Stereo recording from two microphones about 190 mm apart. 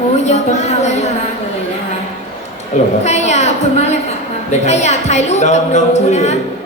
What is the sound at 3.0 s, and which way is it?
A woman's voice, 35° left (ahead or behind).